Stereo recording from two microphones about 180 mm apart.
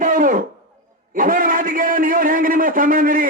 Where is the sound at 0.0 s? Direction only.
45° right (ahead or behind).